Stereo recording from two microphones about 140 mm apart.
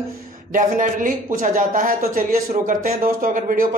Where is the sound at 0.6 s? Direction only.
65° right (ahead or behind).